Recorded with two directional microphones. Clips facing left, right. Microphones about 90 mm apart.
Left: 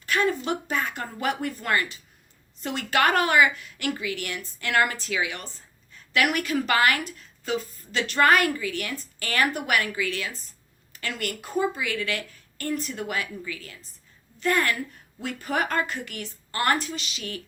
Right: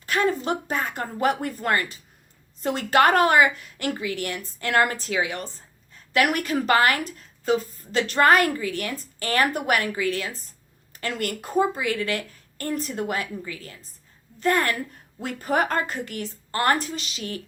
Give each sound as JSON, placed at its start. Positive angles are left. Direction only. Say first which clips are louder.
{"t": 0.0, "sound": "a woman's voice", "louder": "right 1 dB", "side_deg": -35}